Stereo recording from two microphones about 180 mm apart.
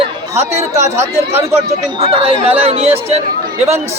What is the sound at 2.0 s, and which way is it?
Speech, 35° right (ahead or behind).